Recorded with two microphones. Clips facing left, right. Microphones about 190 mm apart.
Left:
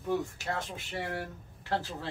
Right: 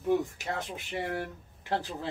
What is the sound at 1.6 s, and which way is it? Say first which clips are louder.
Speech: right 1 dB; 15° right (ahead or behind).